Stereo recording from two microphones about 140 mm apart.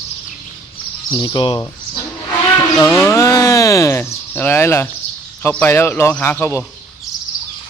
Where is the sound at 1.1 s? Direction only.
35° left (ahead or behind).